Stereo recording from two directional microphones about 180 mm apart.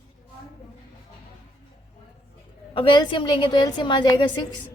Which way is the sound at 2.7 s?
25° left (ahead or behind).